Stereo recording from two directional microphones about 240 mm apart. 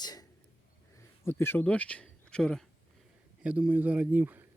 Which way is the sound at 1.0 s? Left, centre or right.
Centre.